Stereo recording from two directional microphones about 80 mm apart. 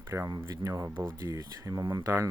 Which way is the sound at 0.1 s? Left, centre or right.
Right.